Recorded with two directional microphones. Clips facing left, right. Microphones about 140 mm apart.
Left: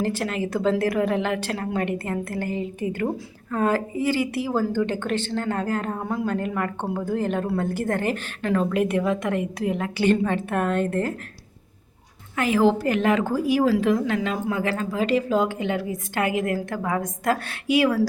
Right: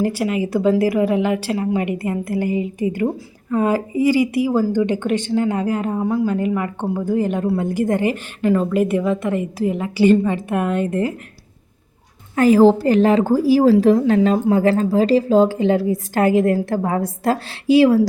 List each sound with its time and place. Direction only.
0.0 s speech: 10° right (ahead or behind)
12.4 s a woman's voice: 40° right (ahead or behind)